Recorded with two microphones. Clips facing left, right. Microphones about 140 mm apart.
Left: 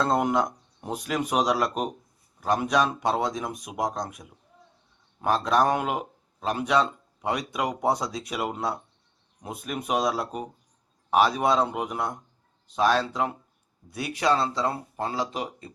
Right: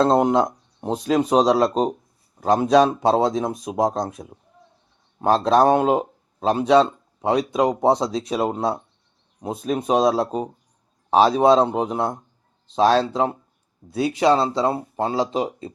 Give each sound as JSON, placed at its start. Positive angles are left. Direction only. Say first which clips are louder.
{"t": 0.0, "sound": "speech", "louder": "right 7 dB", "side_deg": -25}